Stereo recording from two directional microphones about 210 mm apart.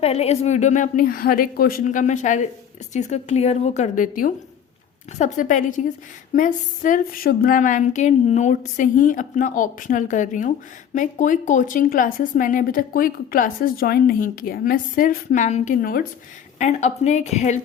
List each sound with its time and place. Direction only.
0.0 s speech: 30° left (ahead or behind)